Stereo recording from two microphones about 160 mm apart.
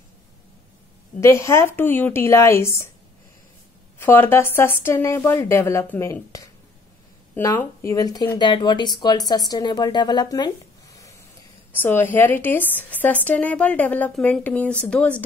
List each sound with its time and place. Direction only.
1.2 s speech: 15° left (ahead or behind)
4.0 s speech: 15° left (ahead or behind)
11.7 s speech: 10° left (ahead or behind)